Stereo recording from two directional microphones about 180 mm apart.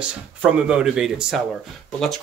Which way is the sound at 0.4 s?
5° right (ahead or behind).